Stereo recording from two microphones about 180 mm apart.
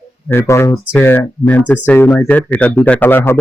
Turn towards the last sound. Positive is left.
turn(degrees=10)  # may be behind; listen again after turning